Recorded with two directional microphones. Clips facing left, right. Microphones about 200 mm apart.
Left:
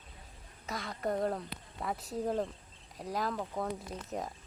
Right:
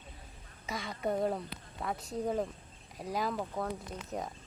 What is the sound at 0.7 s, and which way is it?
Speech, centre (ahead or behind).